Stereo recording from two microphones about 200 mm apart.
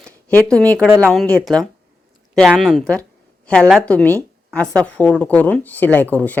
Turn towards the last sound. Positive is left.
turn(degrees=10)  # may be behind; listen again after turning